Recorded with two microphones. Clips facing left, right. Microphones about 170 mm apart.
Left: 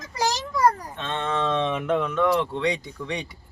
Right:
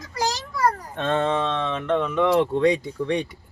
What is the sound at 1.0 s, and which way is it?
Speech, 50° right (ahead or behind).